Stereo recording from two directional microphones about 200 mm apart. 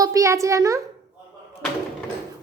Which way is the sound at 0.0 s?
15° right (ahead or behind).